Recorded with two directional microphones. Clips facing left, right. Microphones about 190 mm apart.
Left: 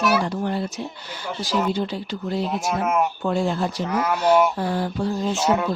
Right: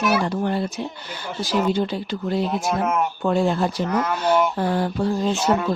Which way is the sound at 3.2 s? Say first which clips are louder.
Right 3 dB; 60° right (ahead or behind).